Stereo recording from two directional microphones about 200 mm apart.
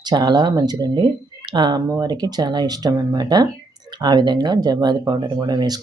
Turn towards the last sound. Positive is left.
turn(degrees=-20)  # may be behind; listen again after turning